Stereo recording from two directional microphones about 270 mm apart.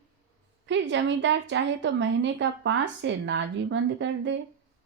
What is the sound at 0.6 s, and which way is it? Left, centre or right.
A woman's voice, right.